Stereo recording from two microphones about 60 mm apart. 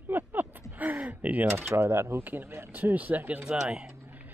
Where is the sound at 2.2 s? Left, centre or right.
Right.